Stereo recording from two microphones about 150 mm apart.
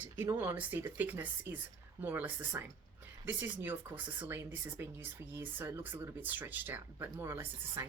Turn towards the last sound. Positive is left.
turn(degrees=-15)  # may be behind; listen again after turning